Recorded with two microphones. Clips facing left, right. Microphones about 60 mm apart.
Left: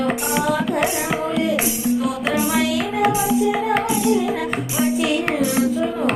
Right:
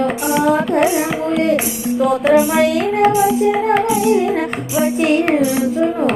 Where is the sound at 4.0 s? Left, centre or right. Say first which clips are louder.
Right 4 dB; right.